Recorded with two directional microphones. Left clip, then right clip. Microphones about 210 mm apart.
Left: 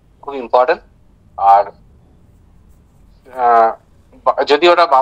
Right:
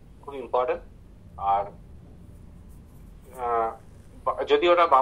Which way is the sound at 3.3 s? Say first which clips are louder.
Left 15 dB; 55° left (ahead or behind).